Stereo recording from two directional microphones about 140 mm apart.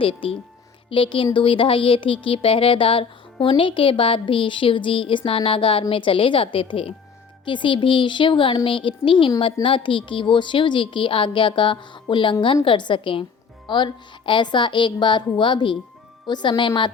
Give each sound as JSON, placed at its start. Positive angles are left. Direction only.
{"t": 0.0, "sound": "speech", "side_deg": 40}